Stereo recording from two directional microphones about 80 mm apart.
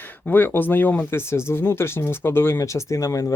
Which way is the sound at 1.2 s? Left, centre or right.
Left.